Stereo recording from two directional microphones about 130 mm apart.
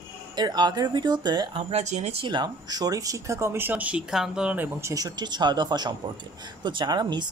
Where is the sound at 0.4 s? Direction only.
35° right (ahead or behind).